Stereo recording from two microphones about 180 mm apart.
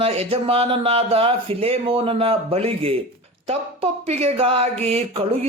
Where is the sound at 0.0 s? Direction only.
35° right (ahead or behind).